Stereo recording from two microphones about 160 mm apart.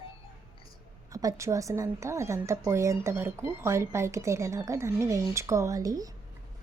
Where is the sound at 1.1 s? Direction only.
20° right (ahead or behind).